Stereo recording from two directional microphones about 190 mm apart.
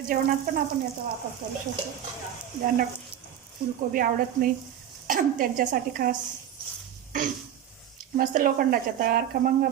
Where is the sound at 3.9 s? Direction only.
45° right (ahead or behind).